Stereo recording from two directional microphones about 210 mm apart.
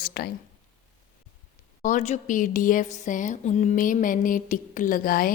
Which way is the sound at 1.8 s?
35° left (ahead or behind).